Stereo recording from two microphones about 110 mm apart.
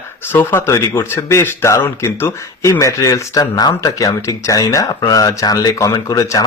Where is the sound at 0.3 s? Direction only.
25° left (ahead or behind).